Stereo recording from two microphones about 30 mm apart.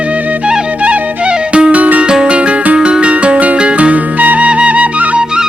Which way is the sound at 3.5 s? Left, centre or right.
Right.